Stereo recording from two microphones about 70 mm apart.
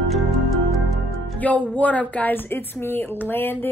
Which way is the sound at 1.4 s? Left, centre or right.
Left.